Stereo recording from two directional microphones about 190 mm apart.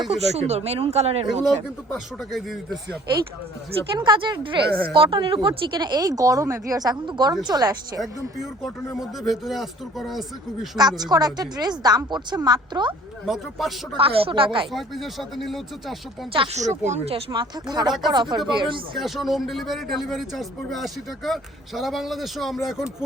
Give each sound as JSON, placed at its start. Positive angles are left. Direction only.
{"t": 0.1, "sound": "speech", "side_deg": -35}
{"t": 1.9, "sound": "speech", "side_deg": 0}
{"t": 3.9, "sound": "speech", "side_deg": -25}
{"t": 8.0, "sound": "speech", "side_deg": 0}
{"t": 10.8, "sound": "speech", "side_deg": -20}
{"t": 13.2, "sound": "speech", "side_deg": 0}
{"t": 13.9, "sound": "speech", "side_deg": -30}
{"t": 14.7, "sound": "speech", "side_deg": 0}
{"t": 16.3, "sound": "speech", "side_deg": -30}
{"t": 18.9, "sound": "speech", "side_deg": 0}